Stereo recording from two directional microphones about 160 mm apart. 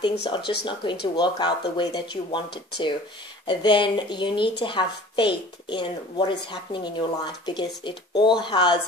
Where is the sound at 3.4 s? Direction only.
30° left (ahead or behind).